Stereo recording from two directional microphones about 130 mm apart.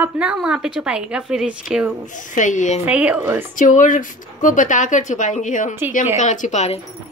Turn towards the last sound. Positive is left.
turn(degrees=60)  # may be behind; listen again after turning